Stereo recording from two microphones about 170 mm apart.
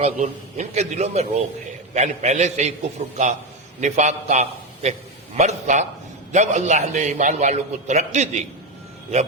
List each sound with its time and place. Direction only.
0.0 s a man's voice: 45° right (ahead or behind)
3.8 s a man's voice: 45° right (ahead or behind)